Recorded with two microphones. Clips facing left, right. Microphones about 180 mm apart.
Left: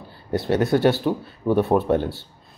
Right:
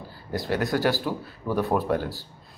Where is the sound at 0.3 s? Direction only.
30° left (ahead or behind).